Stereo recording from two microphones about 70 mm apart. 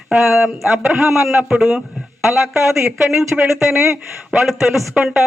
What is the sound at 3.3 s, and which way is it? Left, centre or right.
Speech, centre.